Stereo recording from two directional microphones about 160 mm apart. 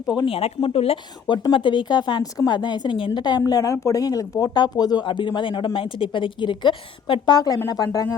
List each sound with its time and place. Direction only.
0.3 s speech: 35° left (ahead or behind)